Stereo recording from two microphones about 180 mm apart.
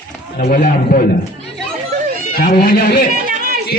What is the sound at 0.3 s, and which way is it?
Speech, 45° left (ahead or behind).